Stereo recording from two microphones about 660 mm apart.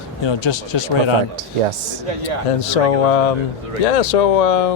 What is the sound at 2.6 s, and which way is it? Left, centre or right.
Mantra, left.